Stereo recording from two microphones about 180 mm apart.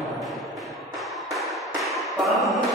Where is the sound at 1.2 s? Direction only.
Centre (ahead or behind).